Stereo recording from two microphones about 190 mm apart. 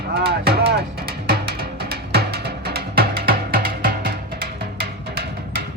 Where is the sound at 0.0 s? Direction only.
55° right (ahead or behind).